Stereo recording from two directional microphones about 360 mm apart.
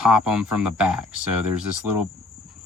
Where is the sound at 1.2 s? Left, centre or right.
Right.